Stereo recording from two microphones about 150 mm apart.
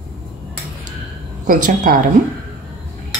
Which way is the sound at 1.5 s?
70° right (ahead or behind).